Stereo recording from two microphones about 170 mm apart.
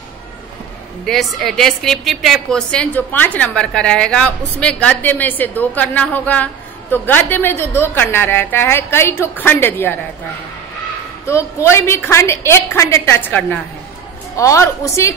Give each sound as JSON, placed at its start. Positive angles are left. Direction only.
{"t": 1.0, "sound": "a woman's voice", "side_deg": 0}
{"t": 11.2, "sound": "a woman's voice", "side_deg": 15}